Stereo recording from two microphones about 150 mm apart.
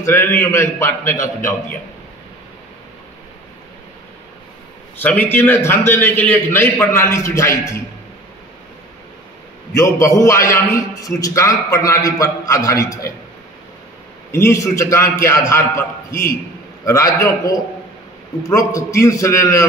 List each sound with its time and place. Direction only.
0.0 s a man's voice: 15° left (ahead or behind)
4.9 s a man's voice: 10° left (ahead or behind)
9.8 s a man's voice: 20° left (ahead or behind)
14.3 s a man's voice: 20° left (ahead or behind)